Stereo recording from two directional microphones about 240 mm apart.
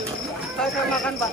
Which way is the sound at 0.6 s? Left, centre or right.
Centre.